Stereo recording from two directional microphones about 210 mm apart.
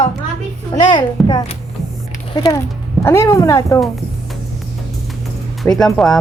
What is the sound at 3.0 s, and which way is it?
Speech, 10° left (ahead or behind).